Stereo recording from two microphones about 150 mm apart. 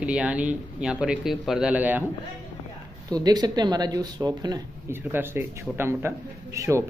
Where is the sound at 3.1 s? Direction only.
25° right (ahead or behind).